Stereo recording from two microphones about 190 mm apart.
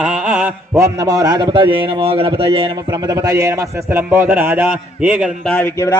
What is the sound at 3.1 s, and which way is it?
A man's voice, 20° right (ahead or behind).